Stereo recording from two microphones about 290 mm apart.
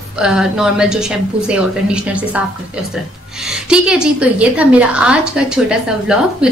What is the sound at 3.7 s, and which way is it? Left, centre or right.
A woman's voice, centre.